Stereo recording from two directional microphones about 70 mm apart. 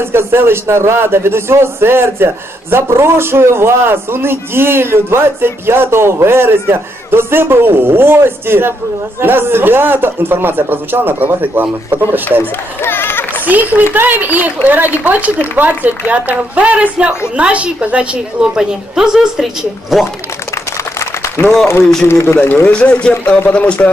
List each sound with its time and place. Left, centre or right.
0.0 s a man's voice: right
12.8 s speech: left
13.5 s a woman's voice: right; by 20.1 s centre
20.5 s a sound: left
22.0 s speech: left
22.7 s a man's voice: centre